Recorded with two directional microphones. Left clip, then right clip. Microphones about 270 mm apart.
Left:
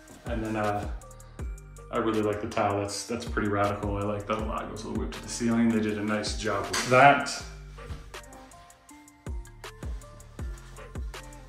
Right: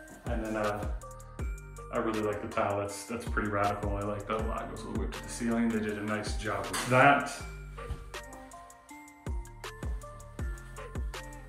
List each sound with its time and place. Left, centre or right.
0.2 s speech: centre
7.8 s music: centre